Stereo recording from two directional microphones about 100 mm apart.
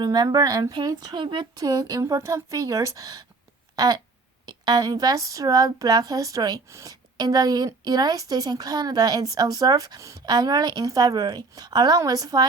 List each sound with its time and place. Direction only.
0.0 s speech: 45° right (ahead or behind)
0.7 s speech: 45° right (ahead or behind)